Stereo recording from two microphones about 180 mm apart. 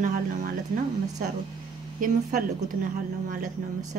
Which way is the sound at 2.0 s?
45° right (ahead or behind).